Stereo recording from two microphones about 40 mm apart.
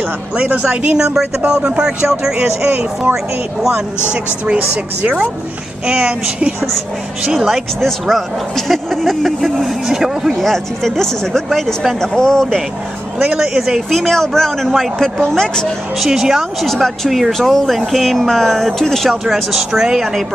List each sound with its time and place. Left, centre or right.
0.4 s a woman's voice: right
0.9 s speech: centre
5.9 s speech: right
7.8 s speech: centre
10.3 s speech: centre
13.2 s speech: right
13.5 s speech: centre
13.8 s speech: centre
16.0 s speech: centre
16.6 s speech: centre
19.0 s speech: centre